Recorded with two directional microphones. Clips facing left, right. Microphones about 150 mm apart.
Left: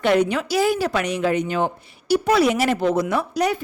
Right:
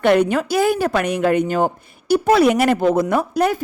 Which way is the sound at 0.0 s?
55° right (ahead or behind).